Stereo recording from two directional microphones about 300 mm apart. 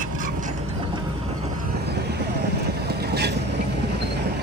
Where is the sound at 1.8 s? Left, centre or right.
Right.